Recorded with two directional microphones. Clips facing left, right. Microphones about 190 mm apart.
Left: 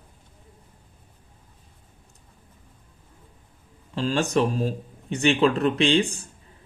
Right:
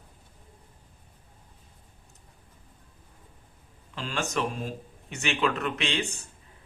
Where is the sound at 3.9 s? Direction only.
35° left (ahead or behind).